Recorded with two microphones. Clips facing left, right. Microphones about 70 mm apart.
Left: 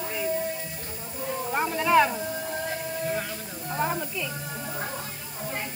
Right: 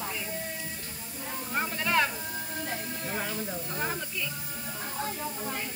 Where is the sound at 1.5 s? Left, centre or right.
Centre.